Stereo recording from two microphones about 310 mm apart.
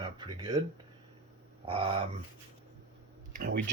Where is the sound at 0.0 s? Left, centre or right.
Centre.